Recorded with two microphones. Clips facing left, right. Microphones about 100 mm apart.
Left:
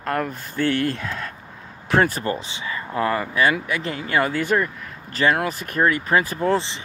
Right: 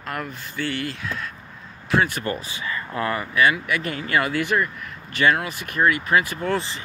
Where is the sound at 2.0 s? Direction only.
30° left (ahead or behind).